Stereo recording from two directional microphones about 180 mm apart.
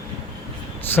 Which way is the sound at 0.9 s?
10° left (ahead or behind).